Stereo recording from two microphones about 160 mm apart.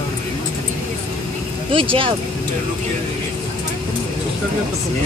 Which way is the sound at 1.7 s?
35° right (ahead or behind).